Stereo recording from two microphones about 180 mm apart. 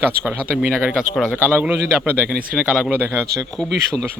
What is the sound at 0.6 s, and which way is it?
A man's voice, 5° right (ahead or behind).